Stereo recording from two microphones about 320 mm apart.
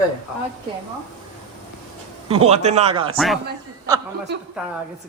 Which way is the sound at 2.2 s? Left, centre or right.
Centre.